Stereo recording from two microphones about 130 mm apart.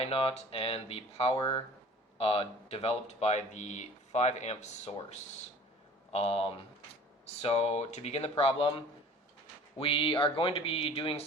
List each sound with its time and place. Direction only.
0.0 s speech: 50° left (ahead or behind)